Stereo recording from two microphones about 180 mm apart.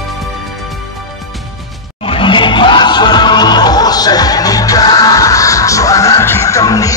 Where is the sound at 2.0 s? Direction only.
30° left (ahead or behind).